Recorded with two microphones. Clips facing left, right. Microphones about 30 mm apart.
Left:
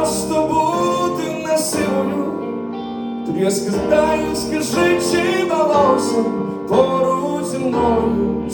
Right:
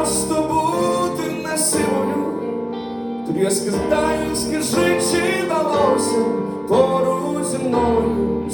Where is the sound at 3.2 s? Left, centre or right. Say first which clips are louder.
Left 1 dB; right.